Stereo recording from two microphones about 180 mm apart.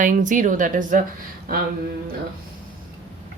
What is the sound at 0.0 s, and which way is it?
Speech, 45° right (ahead or behind).